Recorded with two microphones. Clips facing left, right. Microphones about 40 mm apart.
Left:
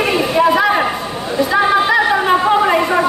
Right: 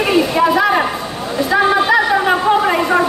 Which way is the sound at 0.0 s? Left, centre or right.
Centre.